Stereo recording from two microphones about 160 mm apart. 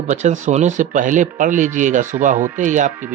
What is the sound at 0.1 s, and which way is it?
Speech, 45° right (ahead or behind).